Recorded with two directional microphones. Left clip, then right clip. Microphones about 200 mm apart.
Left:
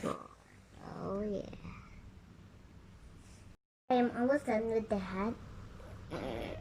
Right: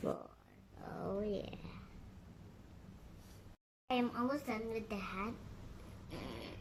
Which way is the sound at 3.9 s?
10° right (ahead or behind).